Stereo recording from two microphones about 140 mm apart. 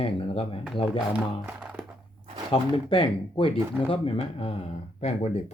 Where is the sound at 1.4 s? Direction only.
10° right (ahead or behind).